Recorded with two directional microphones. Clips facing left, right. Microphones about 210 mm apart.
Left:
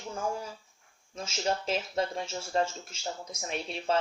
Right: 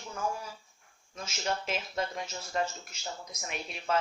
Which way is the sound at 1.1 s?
30° left (ahead or behind).